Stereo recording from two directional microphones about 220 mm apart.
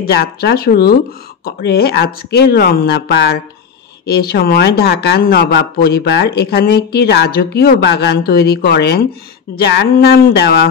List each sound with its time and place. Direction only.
0.0 s speech: 50° left (ahead or behind)